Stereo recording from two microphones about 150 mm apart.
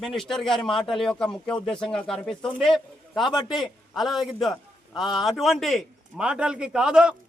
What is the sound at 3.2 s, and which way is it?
Speech, 30° left (ahead or behind).